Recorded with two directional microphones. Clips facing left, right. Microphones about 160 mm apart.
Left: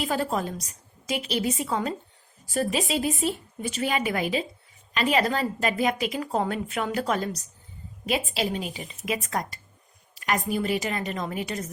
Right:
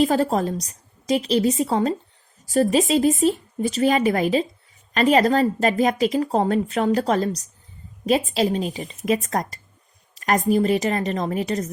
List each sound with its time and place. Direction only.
0.0 s a woman's voice: 40° right (ahead or behind)